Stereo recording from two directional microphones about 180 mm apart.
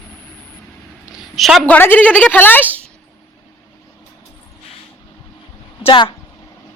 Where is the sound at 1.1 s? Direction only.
Centre (ahead or behind).